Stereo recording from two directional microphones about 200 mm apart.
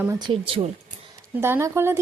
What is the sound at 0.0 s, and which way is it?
Speech, 15° right (ahead or behind).